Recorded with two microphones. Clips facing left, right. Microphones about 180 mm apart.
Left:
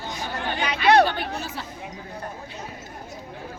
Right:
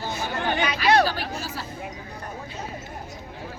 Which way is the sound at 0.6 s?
60° left (ahead or behind).